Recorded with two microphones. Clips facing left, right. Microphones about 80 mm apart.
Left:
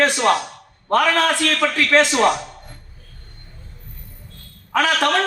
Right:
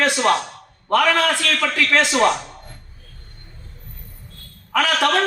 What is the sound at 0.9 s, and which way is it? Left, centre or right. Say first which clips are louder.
A man's voice: even; left.